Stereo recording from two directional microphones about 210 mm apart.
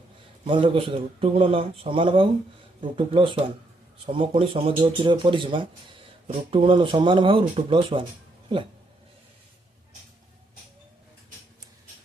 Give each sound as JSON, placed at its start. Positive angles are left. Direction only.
{"t": 0.4, "sound": "speech", "side_deg": -25}